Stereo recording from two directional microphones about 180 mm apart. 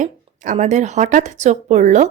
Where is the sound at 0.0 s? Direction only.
40° right (ahead or behind).